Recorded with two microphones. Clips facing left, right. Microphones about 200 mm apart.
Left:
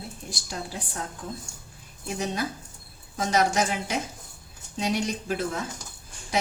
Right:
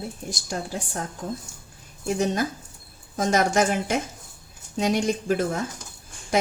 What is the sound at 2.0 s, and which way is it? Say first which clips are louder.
A woman's voice: right 6 dB; 45° right (ahead or behind).